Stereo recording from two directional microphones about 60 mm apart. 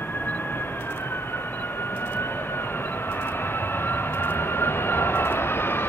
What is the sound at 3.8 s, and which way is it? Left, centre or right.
Vehicle, left.